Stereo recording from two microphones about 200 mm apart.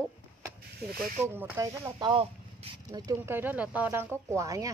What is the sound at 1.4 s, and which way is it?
Speech, 10° right (ahead or behind).